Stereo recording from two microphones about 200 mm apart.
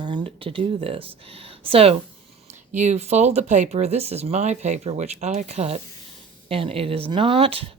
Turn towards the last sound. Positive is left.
turn(degrees=-30)  # may be behind; listen again after turning